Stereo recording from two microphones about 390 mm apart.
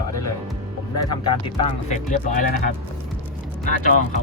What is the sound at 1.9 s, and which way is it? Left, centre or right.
Speech, centre.